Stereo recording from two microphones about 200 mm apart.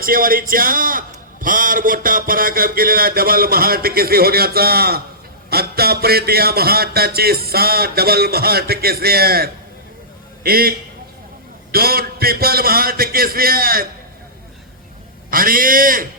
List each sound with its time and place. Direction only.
0.0 s a man's voice: 45° right (ahead or behind)
15.3 s a man's voice: 45° right (ahead or behind)